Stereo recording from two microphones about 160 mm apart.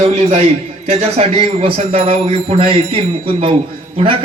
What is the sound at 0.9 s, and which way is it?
A man's voice, 40° right (ahead or behind).